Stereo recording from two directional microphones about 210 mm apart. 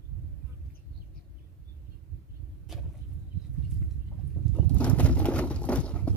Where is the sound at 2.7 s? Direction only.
Centre (ahead or behind).